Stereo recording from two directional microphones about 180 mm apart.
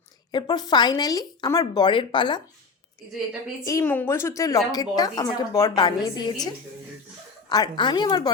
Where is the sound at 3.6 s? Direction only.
15° left (ahead or behind).